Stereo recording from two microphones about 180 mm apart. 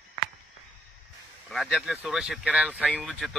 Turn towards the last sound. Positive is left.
turn(degrees=0)  # may be behind; listen again after turning